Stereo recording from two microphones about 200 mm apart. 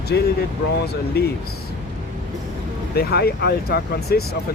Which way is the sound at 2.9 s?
50° left (ahead or behind).